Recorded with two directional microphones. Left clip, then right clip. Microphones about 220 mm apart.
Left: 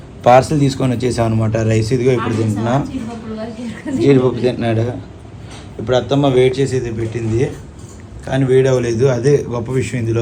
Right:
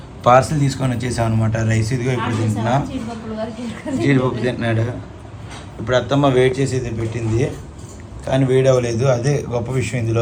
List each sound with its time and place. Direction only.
0.3 s speech: 15° right (ahead or behind)
6.6 s a man's voice: centre (ahead or behind)